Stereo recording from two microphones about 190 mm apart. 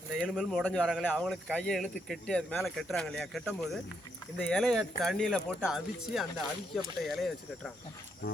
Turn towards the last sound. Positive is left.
turn(degrees=0)  # may be behind; listen again after turning